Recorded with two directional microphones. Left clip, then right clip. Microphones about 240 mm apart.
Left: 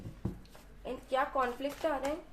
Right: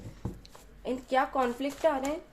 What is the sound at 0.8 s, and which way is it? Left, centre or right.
Speech, right.